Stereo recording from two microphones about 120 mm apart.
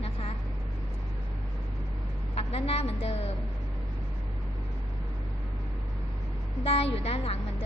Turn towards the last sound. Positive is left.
turn(degrees=55)  # may be behind; listen again after turning